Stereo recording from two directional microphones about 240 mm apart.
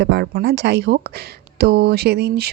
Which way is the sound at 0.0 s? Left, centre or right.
Right.